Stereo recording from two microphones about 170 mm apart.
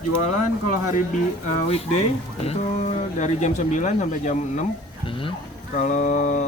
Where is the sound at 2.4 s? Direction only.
40° left (ahead or behind).